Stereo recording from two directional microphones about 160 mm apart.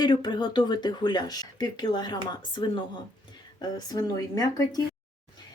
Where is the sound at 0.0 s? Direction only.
30° left (ahead or behind).